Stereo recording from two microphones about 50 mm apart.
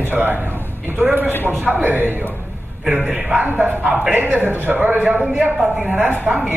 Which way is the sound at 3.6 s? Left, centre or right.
Right.